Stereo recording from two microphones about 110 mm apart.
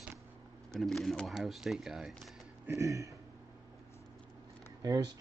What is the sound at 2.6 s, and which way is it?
Speech, 30° right (ahead or behind).